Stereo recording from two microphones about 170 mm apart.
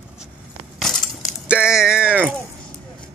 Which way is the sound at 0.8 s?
Centre (ahead or behind).